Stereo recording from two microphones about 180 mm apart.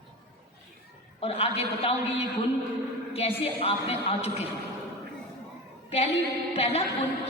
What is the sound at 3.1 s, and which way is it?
A woman's voice, 35° left (ahead or behind).